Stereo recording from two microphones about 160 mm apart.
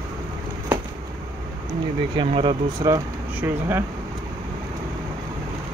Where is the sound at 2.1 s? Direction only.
30° right (ahead or behind).